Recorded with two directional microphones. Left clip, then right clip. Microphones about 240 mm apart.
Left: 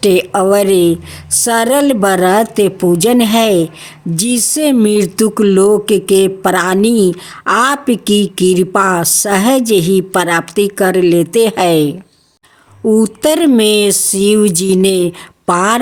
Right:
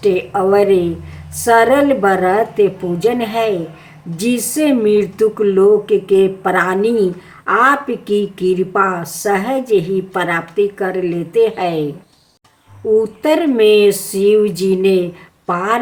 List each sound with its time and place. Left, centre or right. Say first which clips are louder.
0.0 s speech: left 4 dB; left
13.0 s speech: left 3 dB; left